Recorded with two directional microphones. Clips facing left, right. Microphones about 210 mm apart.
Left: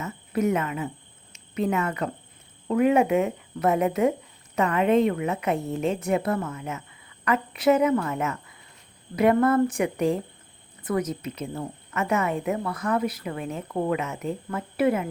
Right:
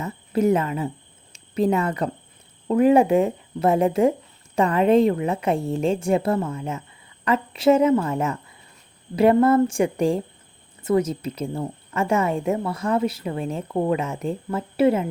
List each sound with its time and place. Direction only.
0.0 s cricket: 30° right (ahead or behind)
1.3 s a woman's voice: 35° right (ahead or behind)